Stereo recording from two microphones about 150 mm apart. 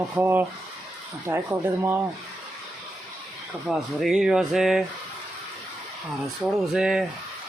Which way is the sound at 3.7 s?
5° right (ahead or behind).